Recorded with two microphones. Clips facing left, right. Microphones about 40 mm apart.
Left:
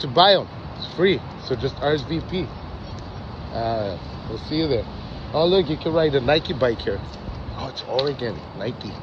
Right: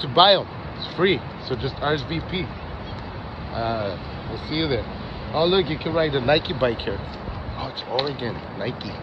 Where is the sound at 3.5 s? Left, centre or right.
Right.